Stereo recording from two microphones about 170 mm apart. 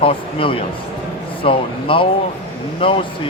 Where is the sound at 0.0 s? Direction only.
30° left (ahead or behind).